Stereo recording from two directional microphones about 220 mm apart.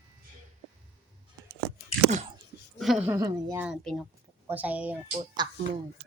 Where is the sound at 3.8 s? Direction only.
Centre (ahead or behind).